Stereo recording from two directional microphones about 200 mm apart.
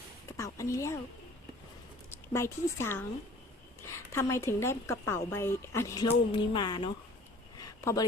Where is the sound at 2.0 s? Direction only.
15° left (ahead or behind).